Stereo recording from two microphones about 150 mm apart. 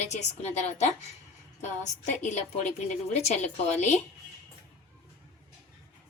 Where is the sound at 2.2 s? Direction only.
50° left (ahead or behind).